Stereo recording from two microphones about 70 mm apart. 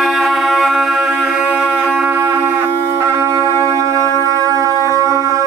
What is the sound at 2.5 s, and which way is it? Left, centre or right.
Music, right.